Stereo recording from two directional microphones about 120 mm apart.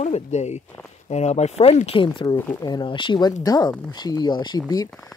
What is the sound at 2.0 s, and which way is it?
Speech, 40° left (ahead or behind).